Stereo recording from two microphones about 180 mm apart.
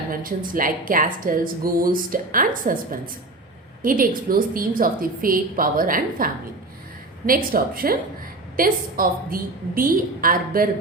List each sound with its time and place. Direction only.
0.1 s a woman's voice: 50° right (ahead or behind)
3.8 s a woman's voice: 50° right (ahead or behind)